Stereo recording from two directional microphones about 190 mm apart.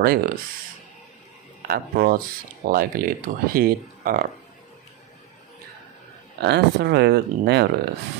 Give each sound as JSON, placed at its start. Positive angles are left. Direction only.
{"t": 0.0, "sound": "speech", "side_deg": -50}
{"t": 1.7, "sound": "speech", "side_deg": -50}
{"t": 6.4, "sound": "speech", "side_deg": -60}